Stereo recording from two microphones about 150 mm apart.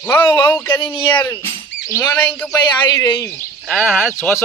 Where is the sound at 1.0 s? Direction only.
15° left (ahead or behind).